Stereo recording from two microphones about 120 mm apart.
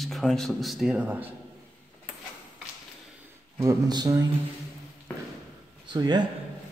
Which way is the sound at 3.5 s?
30° right (ahead or behind).